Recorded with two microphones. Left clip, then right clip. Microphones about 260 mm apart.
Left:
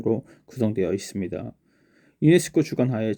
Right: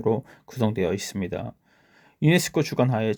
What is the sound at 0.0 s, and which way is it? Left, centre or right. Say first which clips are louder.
Speech: right 1 dB; centre.